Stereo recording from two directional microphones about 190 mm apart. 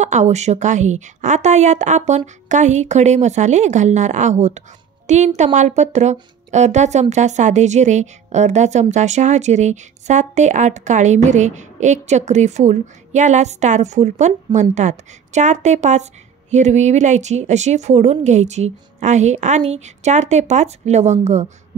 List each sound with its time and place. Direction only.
0.0 s a woman's voice: 40° right (ahead or behind)